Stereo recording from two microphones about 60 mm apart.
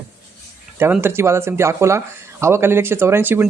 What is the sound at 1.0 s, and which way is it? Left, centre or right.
Speech, right.